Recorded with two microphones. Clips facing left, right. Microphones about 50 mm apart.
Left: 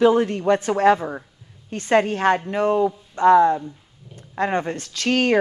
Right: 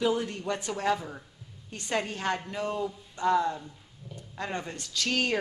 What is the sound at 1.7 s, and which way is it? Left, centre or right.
Speech, left.